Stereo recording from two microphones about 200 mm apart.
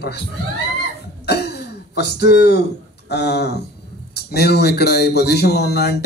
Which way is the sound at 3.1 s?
55° left (ahead or behind).